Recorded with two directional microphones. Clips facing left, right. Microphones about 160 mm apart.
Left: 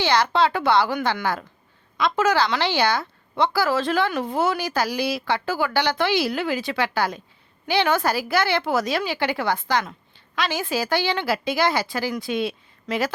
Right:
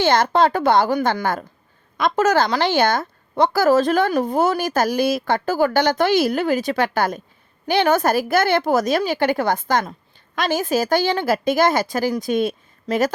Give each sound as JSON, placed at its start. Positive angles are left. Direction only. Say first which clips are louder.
{"t": 0.0, "sound": "a woman's voice", "louder": "right 4 dB", "side_deg": -45}